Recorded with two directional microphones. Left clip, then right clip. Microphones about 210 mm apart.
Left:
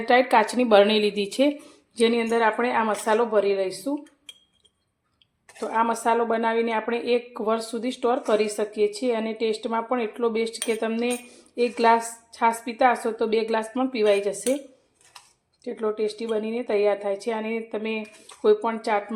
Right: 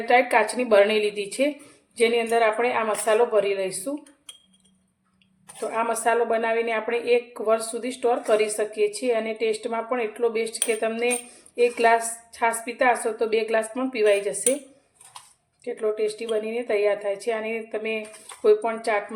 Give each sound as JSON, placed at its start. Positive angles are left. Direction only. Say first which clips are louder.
{"t": 0.1, "sound": "a woman's voice", "louder": "even", "side_deg": 30}
{"t": 5.5, "sound": "a woman's voice", "louder": "left 2 dB", "side_deg": 20}
{"t": 15.6, "sound": "a woman's voice", "louder": "right 1 dB", "side_deg": 20}